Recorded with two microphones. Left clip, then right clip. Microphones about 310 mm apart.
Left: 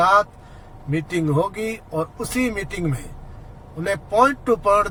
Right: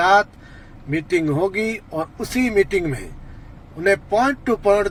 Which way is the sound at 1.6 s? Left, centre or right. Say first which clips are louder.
Right 1 dB; centre.